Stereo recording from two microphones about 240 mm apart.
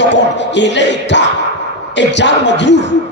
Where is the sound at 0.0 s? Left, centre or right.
Left.